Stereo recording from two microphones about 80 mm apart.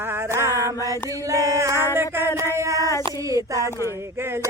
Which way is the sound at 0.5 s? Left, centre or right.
Left.